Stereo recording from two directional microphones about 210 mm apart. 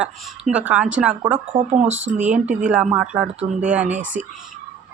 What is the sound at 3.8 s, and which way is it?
Speech, 35° right (ahead or behind).